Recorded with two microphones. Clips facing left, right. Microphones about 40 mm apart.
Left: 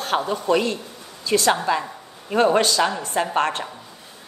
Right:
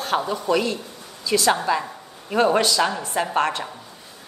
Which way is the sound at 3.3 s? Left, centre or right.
Left.